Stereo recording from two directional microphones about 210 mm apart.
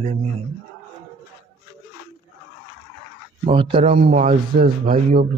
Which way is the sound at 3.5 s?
25° right (ahead or behind).